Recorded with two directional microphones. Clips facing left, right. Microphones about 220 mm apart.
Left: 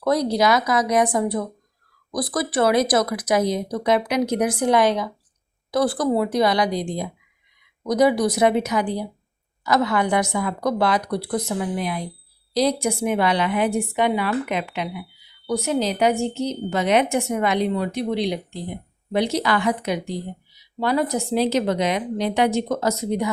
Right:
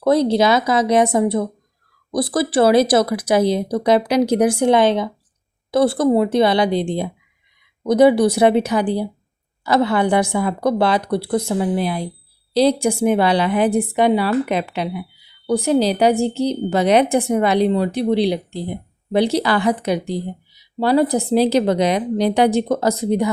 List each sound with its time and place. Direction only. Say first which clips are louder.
0.0 s a woman's voice: right 5 dB; 25° right (ahead or behind)